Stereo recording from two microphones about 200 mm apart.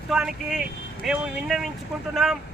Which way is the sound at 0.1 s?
Centre (ahead or behind).